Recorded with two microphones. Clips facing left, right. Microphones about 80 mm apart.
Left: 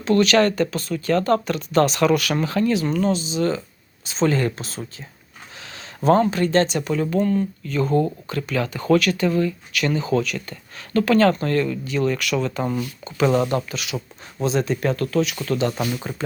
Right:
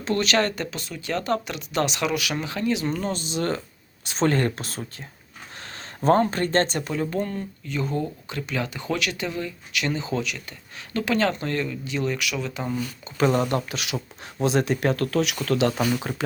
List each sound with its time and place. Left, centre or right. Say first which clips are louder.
0.0 s speech: left 6 dB; right
3.1 s speech: left 5 dB; right
6.1 s speech: left 3 dB; right
6.8 s speech: left 6 dB; right
12.2 s speech: left 6 dB; centre
13.2 s speech: left 2 dB; centre
13.7 s speech: left 1 dB; right